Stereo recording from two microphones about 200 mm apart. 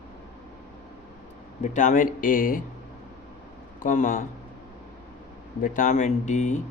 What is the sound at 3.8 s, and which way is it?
Speech, 40° left (ahead or behind).